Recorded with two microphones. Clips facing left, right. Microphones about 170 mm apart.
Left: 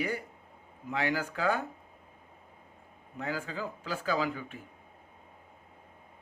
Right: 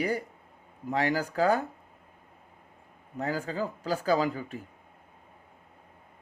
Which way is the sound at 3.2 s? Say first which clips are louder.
Right 5 dB; 40° right (ahead or behind).